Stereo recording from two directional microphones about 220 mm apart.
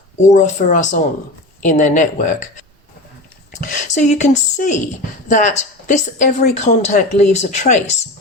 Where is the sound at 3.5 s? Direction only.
35° left (ahead or behind).